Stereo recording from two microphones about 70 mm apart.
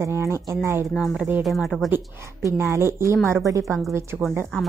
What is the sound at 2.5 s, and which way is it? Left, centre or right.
A woman's voice, right.